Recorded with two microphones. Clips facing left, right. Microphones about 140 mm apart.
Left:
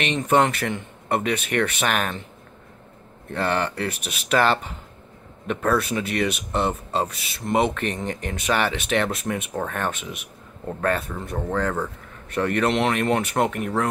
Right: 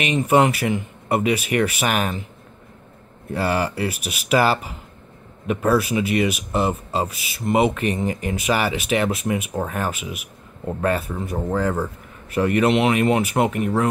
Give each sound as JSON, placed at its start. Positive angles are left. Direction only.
{"t": 0.0, "sound": "speech", "side_deg": -5}
{"t": 3.3, "sound": "speech", "side_deg": -5}